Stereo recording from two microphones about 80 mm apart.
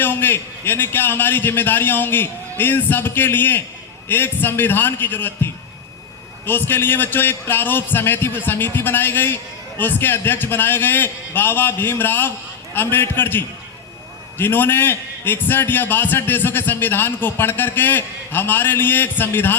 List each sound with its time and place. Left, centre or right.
0.0 s a man's voice: left